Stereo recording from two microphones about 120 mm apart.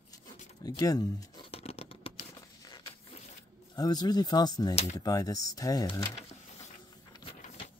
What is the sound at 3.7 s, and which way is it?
Speech, 35° left (ahead or behind).